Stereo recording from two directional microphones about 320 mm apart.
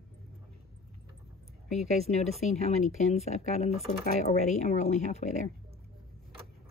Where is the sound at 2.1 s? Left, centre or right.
Left.